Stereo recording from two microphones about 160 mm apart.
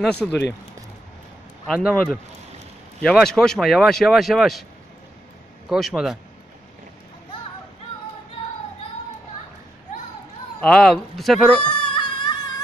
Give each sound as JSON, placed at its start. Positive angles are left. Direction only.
{"t": 0.0, "sound": "speech", "side_deg": 10}
{"t": 0.3, "sound": "speech", "side_deg": 90}
{"t": 1.7, "sound": "speech", "side_deg": 0}
{"t": 5.7, "sound": "speech", "side_deg": 0}
{"t": 10.6, "sound": "speech", "side_deg": 5}
{"t": 11.6, "sound": "a sound", "side_deg": 30}